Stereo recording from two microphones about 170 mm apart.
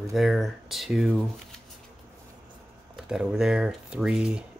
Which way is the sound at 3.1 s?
5° right (ahead or behind).